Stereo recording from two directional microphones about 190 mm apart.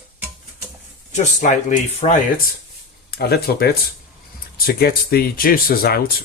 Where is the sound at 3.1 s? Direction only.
55° left (ahead or behind).